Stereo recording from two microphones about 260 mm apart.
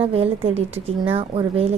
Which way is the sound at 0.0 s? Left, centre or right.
Right.